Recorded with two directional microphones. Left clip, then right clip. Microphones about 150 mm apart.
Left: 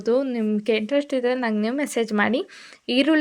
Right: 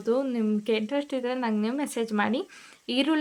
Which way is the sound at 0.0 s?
20° left (ahead or behind).